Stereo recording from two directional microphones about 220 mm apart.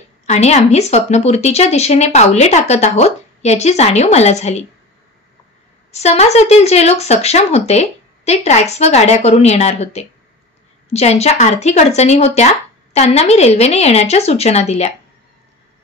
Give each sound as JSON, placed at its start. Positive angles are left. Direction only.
{"t": 0.3, "sound": "speech", "side_deg": 30}
{"t": 5.9, "sound": "speech", "side_deg": 30}